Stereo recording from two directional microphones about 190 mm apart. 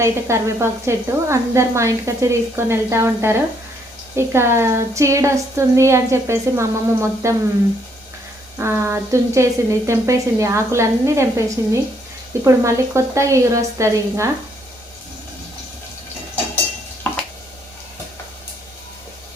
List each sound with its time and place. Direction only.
0.0 s a woman's voice: 15° right (ahead or behind)
8.5 s a woman's voice: 15° right (ahead or behind)